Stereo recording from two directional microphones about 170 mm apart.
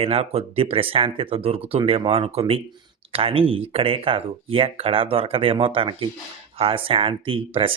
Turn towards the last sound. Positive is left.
turn(degrees=-30)  # may be behind; listen again after turning